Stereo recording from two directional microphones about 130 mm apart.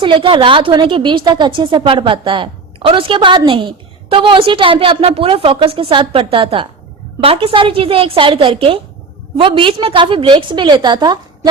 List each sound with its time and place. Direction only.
0.0 s a woman's voice: 40° right (ahead or behind)